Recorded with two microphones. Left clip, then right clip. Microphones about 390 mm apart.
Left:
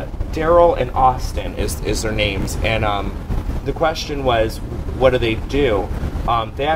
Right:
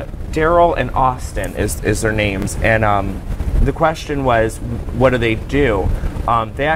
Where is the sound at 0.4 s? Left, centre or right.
Right.